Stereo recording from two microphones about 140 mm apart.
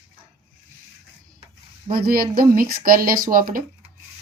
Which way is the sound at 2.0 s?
90° right.